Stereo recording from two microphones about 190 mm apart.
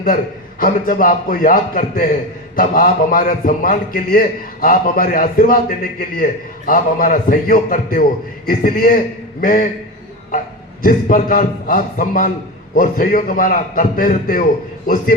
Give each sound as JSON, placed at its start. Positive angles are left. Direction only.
{"t": 0.6, "sound": "a man's voice", "side_deg": 45}
{"t": 10.8, "sound": "a man's voice", "side_deg": 45}